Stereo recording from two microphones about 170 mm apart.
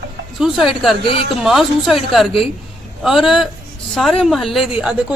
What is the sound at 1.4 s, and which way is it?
A man's voice, centre (ahead or behind).